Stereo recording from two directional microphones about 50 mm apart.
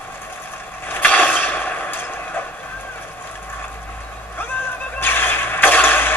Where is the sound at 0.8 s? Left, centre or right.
Left.